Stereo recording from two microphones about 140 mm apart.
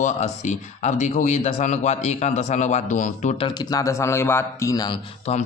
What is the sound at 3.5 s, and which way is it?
A man's voice, 30° left (ahead or behind).